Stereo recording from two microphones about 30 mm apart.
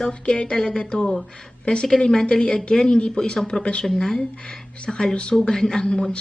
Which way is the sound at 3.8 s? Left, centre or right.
Centre.